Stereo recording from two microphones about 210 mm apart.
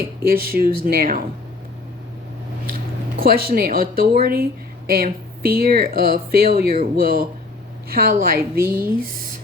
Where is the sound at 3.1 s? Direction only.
45° right (ahead or behind).